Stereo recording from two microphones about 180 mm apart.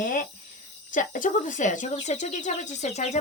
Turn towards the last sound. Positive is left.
turn(degrees=40)  # may be behind; listen again after turning